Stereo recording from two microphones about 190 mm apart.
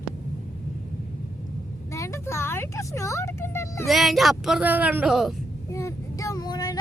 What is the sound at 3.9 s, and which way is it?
Speech, centre (ahead or behind).